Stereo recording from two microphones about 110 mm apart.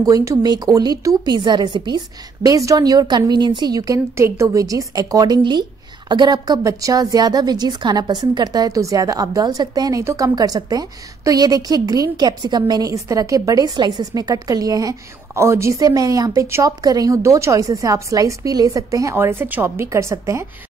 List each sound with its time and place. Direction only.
0.0 s a woman's voice: 30° right (ahead or behind)
2.4 s a woman's voice: 35° right (ahead or behind)